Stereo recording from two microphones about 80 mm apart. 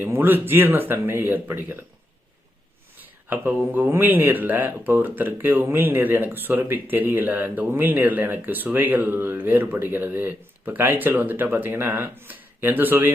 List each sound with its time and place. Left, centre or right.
0.0 s speech: right
3.0 s a sound: right
3.7 s speech: right